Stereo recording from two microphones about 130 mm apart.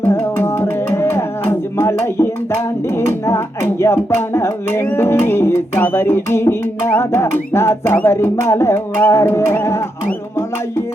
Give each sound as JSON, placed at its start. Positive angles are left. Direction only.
{"t": 0.0, "sound": "music", "side_deg": 15}